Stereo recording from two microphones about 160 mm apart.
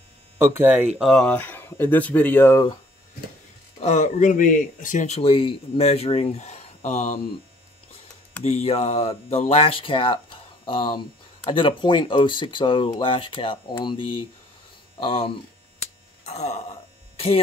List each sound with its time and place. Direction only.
0.4 s speech: 15° right (ahead or behind)
0.9 s speech: centre (ahead or behind); by 2.7 s 15° left (ahead or behind)
3.8 s speech: 45° left (ahead or behind)
8.5 s speech: 40° left (ahead or behind)